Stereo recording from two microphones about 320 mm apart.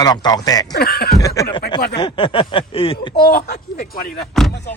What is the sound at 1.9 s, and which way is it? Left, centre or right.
Speech, centre.